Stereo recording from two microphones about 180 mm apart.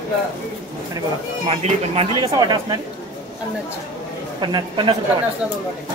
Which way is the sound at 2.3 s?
20° right (ahead or behind).